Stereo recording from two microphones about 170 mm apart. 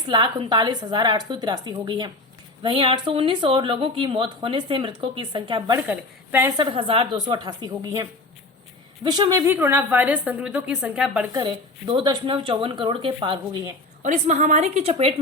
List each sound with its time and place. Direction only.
0.1 s speech: 25° right (ahead or behind)
5.9 s a woman's voice: 15° right (ahead or behind)
6.6 s speech: 30° right (ahead or behind)
9.0 s speech: 25° right (ahead or behind)
9.5 s a woman's voice: 10° right (ahead or behind)
11.3 s speech: 30° right (ahead or behind)
14.0 s a woman's voice: 45° right (ahead or behind)